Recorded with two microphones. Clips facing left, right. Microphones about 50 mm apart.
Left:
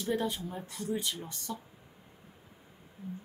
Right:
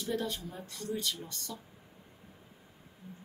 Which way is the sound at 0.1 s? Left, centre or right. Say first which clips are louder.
Left 3 dB; centre.